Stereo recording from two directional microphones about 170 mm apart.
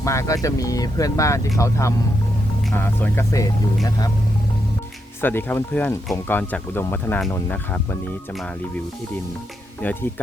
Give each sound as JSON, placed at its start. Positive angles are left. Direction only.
{"t": 0.0, "sound": "speech", "side_deg": 20}
{"t": 5.2, "sound": "speech", "side_deg": 10}
{"t": 9.8, "sound": "speech", "side_deg": 10}